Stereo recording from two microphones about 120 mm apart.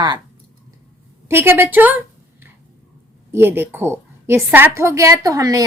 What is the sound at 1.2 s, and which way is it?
Speech, 20° right (ahead or behind).